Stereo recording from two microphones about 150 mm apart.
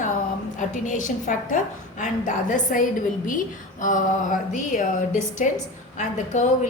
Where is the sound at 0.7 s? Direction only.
55° left (ahead or behind).